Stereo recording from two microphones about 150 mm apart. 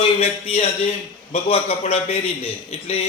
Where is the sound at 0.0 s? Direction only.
40° left (ahead or behind).